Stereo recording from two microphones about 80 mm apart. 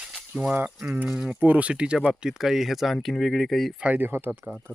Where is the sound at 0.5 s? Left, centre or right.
Right.